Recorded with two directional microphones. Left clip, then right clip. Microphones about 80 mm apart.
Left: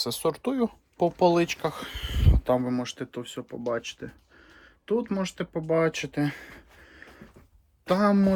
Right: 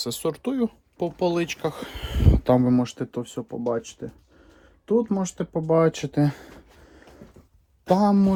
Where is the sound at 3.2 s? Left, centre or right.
Right.